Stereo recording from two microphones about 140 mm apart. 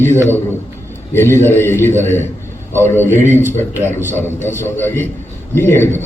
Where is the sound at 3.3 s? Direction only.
15° right (ahead or behind).